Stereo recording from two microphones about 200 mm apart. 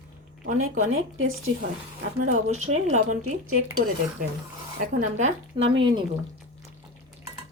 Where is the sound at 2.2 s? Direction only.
35° right (ahead or behind).